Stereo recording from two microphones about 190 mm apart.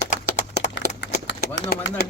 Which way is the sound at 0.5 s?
70° left (ahead or behind).